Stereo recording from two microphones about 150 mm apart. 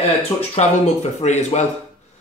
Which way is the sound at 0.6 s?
45° left (ahead or behind).